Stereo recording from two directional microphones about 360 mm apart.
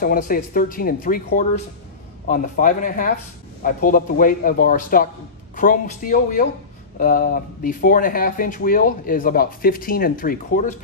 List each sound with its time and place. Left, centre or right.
0.0 s speech: left